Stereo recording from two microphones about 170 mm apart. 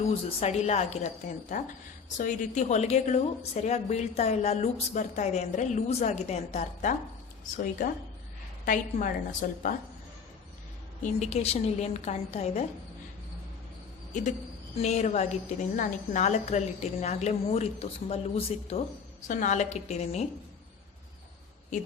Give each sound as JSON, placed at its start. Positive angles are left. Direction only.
{"t": 0.0, "sound": "a woman's voice", "side_deg": 35}
{"t": 7.5, "sound": "a woman's voice", "side_deg": 55}
{"t": 11.0, "sound": "a woman's voice", "side_deg": 40}
{"t": 14.8, "sound": "a woman's voice", "side_deg": 40}